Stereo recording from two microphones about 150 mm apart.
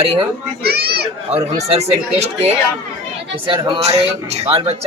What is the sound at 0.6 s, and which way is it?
Children playing, 90° right.